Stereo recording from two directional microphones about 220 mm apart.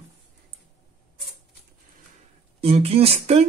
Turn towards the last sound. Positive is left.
turn(degrees=-30)  # may be behind; listen again after turning